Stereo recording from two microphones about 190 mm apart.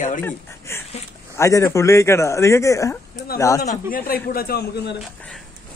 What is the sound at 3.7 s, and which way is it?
A man's voice, 50° left (ahead or behind).